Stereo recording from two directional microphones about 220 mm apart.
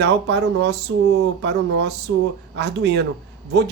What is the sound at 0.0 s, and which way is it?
Speech, 50° right (ahead or behind).